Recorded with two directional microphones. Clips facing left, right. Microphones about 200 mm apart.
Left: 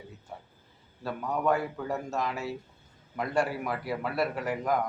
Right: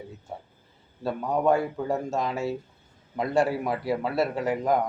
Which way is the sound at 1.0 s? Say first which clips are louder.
Right 5 dB; 25° right (ahead or behind).